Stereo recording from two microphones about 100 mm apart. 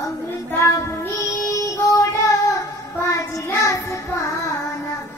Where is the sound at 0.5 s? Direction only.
25° left (ahead or behind).